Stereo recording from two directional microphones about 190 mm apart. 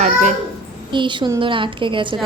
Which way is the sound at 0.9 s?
25° right (ahead or behind).